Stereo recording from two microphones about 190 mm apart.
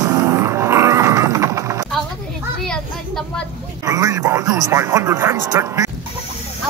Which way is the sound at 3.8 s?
20° right (ahead or behind).